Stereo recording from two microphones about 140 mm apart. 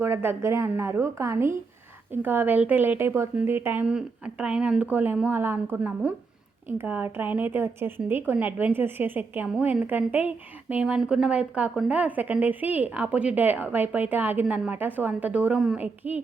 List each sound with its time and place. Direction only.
0.0 s a woman's voice: 20° right (ahead or behind)